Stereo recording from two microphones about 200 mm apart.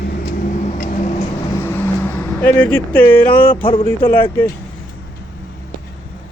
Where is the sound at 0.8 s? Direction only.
40° left (ahead or behind).